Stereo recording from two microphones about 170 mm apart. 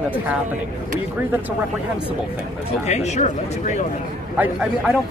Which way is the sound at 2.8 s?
40° left (ahead or behind).